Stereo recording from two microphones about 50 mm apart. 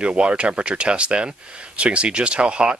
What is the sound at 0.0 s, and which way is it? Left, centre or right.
Speech, right.